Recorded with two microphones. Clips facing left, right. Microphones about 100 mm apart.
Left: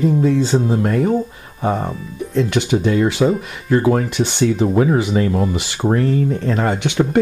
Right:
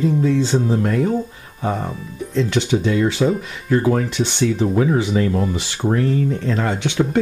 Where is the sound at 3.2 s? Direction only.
40° left (ahead or behind).